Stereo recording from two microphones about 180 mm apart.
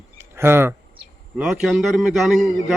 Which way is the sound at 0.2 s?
15° right (ahead or behind).